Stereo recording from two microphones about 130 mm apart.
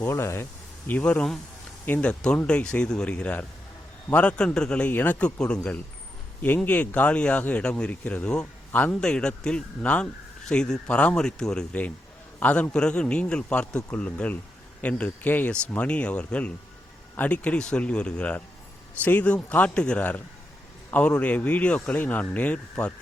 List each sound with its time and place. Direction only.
0.0 s speech: 20° left (ahead or behind)